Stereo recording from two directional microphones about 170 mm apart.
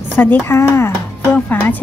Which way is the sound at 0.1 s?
10° left (ahead or behind).